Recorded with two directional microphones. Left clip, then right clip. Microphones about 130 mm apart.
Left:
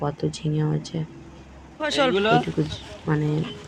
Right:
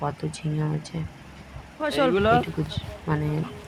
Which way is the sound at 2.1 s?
15° right (ahead or behind).